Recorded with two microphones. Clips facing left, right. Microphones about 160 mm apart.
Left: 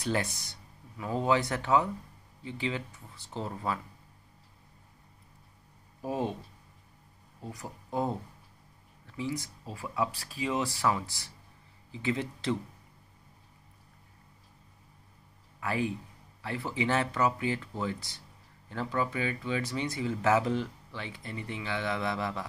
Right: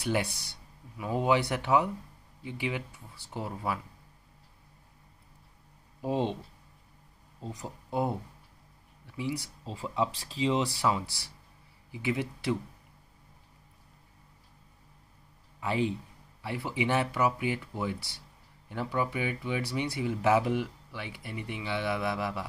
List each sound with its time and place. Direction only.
0.0 s speech: 10° right (ahead or behind)
5.9 s speech: 20° right (ahead or behind)
7.3 s speech: 20° right (ahead or behind)
9.0 s a sound: 15° right (ahead or behind)
9.7 s speech: 20° right (ahead or behind)
15.6 s a man's voice: 20° right (ahead or behind)